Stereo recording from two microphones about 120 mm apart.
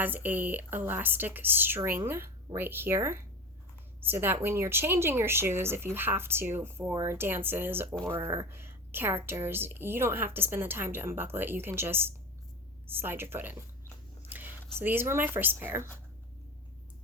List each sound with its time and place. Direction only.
0.0 s a woman's voice: 15° right (ahead or behind)